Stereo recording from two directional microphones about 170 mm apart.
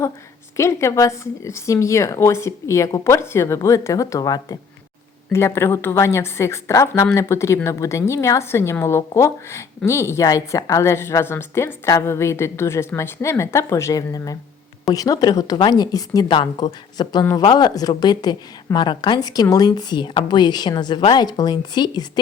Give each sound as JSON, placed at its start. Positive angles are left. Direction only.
{"t": 0.5, "sound": "a woman's voice", "side_deg": 15}